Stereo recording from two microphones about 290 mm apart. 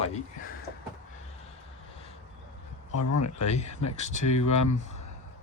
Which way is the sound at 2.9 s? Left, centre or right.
Left.